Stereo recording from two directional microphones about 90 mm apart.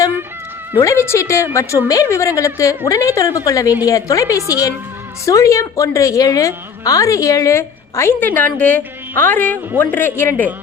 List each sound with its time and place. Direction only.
0.8 s a woman's voice: 35° left (ahead or behind)